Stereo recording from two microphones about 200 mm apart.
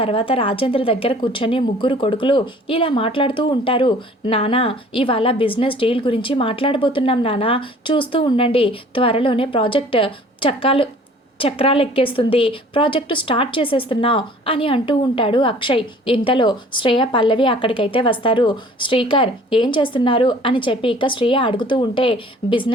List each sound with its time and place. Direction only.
0.0 s a woman's voice: 25° left (ahead or behind)